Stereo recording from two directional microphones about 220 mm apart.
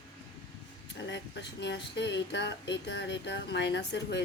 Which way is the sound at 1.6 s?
50° left (ahead or behind).